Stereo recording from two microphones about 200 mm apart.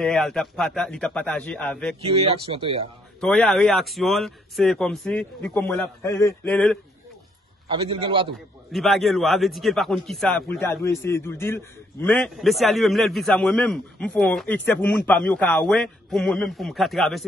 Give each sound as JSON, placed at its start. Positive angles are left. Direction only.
{"t": 0.0, "sound": "a man's voice", "side_deg": 0}
{"t": 2.0, "sound": "speech", "side_deg": -30}
{"t": 3.2, "sound": "a man's voice", "side_deg": 5}
{"t": 7.6, "sound": "speech", "side_deg": -25}
{"t": 8.7, "sound": "a man's voice", "side_deg": 0}